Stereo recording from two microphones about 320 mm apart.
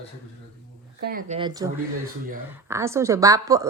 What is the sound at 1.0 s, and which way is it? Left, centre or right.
Speech, right.